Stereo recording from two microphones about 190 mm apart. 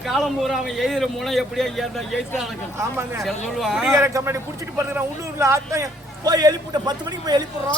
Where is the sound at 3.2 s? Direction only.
Centre (ahead or behind).